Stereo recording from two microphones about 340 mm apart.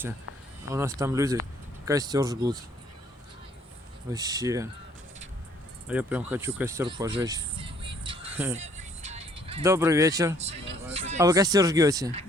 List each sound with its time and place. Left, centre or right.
0.7 s speech: centre
4.1 s speech: centre
5.9 s speech: centre
8.3 s music: centre
8.8 s music: centre
10.9 s speech: centre